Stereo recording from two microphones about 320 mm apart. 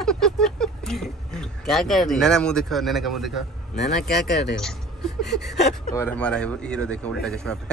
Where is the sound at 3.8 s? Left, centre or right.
Left.